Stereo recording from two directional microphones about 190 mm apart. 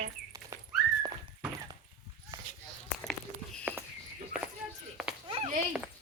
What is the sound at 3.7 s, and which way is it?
Walk, 10° right (ahead or behind).